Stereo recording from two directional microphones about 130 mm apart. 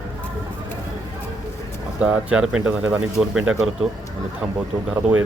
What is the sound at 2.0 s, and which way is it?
Speech, 10° right (ahead or behind).